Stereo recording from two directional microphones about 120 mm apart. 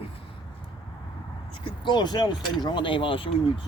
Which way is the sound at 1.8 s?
35° left (ahead or behind).